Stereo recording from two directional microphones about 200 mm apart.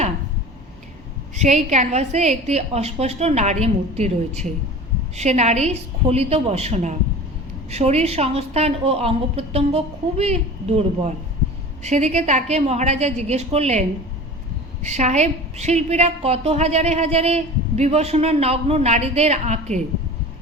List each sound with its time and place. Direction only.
1.4 s a woman's voice: 35° right (ahead or behind)
14.8 s a woman's voice: 35° right (ahead or behind)